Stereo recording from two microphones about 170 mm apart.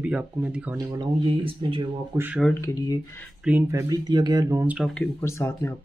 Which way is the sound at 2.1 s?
10° right (ahead or behind).